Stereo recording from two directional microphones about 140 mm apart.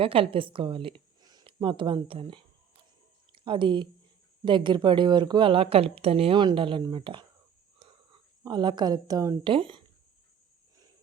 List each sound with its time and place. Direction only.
0.0 s speech: 40° right (ahead or behind)
7.8 s a sound: 40° right (ahead or behind)
9.5 s speech: 40° right (ahead or behind)